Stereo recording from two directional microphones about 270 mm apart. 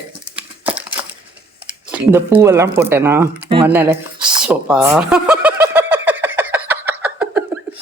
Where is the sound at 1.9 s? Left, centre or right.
Centre.